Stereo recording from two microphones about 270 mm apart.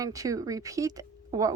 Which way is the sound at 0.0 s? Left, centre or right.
Centre.